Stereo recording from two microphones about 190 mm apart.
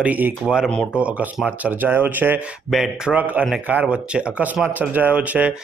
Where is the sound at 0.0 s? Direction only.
5° right (ahead or behind).